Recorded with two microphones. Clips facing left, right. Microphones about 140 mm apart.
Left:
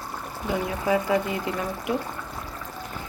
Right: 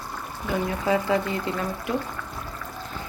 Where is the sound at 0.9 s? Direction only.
15° left (ahead or behind).